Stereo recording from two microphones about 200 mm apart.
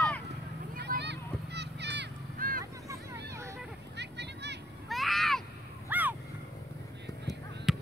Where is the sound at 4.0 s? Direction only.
60° right (ahead or behind).